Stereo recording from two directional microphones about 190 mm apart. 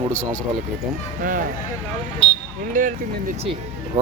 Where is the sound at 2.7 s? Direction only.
45° right (ahead or behind).